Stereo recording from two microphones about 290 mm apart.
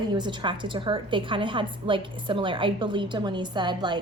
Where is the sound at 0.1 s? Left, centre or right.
Centre.